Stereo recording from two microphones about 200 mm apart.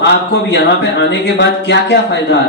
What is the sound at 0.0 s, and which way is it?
Speech, 60° left (ahead or behind).